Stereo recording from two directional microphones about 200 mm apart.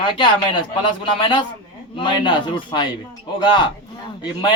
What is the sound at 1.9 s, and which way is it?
A man's voice, 25° left (ahead or behind).